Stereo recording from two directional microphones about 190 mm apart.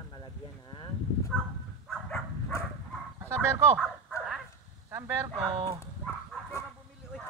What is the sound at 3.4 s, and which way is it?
Speech, 5° right (ahead or behind).